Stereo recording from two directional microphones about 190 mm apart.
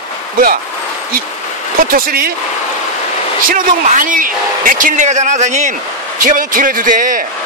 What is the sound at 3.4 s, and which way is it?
A man's voice, 45° right (ahead or behind).